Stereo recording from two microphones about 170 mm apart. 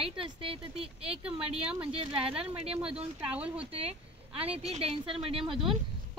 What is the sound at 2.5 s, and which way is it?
A woman's voice, 5° right (ahead or behind).